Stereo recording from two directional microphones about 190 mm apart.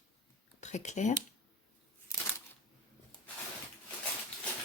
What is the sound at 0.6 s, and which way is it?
Speech, 40° left (ahead or behind).